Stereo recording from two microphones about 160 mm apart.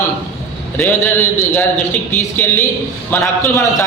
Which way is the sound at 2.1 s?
15° left (ahead or behind).